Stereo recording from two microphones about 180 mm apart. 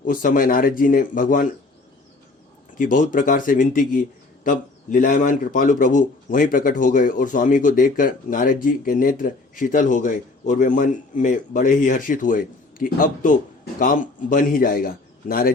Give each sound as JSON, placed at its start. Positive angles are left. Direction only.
{"t": 0.0, "sound": "speech", "side_deg": 50}
{"t": 2.7, "sound": "speech", "side_deg": 50}